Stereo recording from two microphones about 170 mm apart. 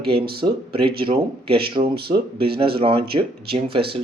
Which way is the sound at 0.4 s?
35° right (ahead or behind).